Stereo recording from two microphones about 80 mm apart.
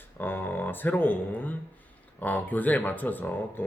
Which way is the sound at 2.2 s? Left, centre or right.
Left.